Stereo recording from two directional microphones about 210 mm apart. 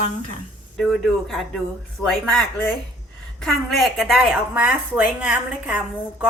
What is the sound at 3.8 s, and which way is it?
A woman's voice, centre (ahead or behind).